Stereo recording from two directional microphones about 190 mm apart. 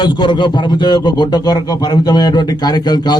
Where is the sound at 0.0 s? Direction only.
20° left (ahead or behind).